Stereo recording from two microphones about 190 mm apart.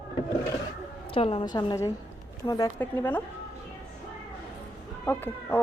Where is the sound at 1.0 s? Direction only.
30° left (ahead or behind); by 3.2 s 10° left (ahead or behind).